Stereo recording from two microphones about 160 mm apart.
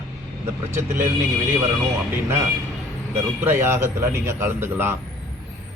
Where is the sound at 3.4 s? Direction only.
15° right (ahead or behind).